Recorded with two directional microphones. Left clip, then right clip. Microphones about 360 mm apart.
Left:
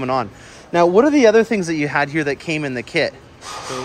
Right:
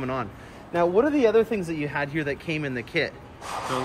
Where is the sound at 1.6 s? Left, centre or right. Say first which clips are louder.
Left 9 dB; centre.